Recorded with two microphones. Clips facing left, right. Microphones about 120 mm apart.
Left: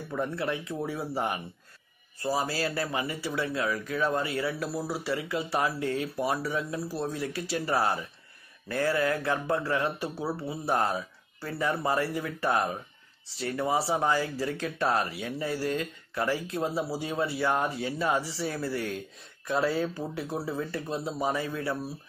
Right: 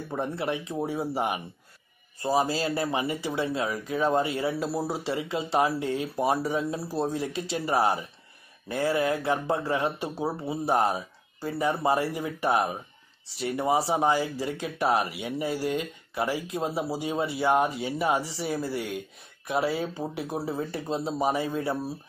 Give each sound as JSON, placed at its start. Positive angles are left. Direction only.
{"t": 0.1, "sound": "speech", "side_deg": -25}